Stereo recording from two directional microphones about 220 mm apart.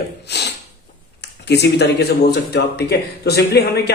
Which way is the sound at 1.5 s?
50° left (ahead or behind).